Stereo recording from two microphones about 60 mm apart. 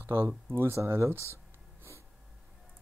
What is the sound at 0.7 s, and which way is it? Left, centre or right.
Speech, right.